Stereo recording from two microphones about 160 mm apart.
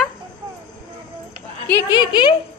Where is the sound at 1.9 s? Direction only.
25° left (ahead or behind).